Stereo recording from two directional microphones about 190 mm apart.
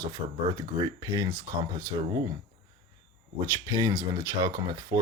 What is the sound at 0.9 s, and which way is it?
Speech, 15° right (ahead or behind).